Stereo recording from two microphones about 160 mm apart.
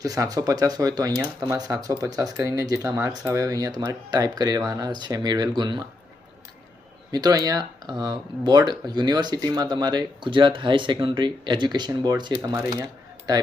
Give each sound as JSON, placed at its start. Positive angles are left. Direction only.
{"t": 0.0, "sound": "speech", "side_deg": -20}
{"t": 7.1, "sound": "speech", "side_deg": -25}
{"t": 12.8, "sound": "coin", "side_deg": -25}